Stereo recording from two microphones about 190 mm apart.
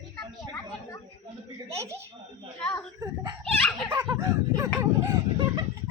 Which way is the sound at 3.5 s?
5° left (ahead or behind).